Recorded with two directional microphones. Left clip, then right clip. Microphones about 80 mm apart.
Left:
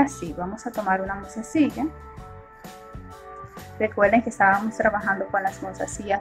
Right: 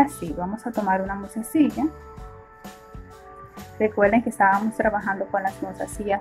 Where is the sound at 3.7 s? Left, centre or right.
Right.